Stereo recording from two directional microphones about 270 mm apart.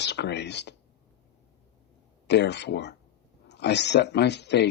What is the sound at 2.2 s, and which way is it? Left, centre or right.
Speech, left.